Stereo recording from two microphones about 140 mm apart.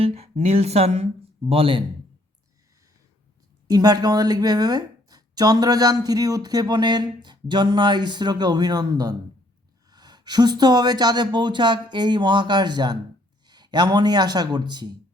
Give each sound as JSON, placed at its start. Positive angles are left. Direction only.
{"t": 0.0, "sound": "speech", "side_deg": -50}
{"t": 3.7, "sound": "a woman's voice", "side_deg": -25}